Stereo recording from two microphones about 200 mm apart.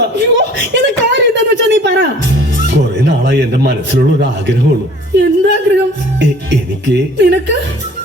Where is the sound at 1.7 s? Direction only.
60° right (ahead or behind).